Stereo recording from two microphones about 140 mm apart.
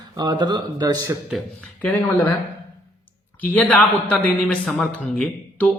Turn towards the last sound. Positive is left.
turn(degrees=5)  # may be behind; listen again after turning